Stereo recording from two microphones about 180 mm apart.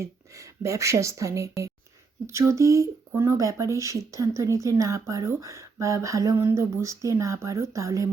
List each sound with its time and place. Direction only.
0.0 s speech: 15° right (ahead or behind)